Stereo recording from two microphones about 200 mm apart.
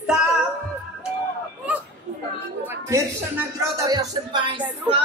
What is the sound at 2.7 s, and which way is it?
Music, 10° right (ahead or behind).